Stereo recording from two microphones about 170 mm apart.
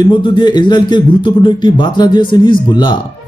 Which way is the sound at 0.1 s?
30° left (ahead or behind).